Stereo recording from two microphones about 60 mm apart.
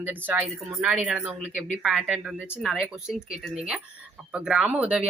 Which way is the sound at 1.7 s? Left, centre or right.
Centre.